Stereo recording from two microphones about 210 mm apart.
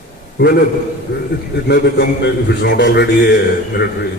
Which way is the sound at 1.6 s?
50° left (ahead or behind).